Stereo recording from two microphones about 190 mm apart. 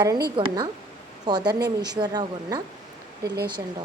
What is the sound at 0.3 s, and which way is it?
Speech, 25° right (ahead or behind).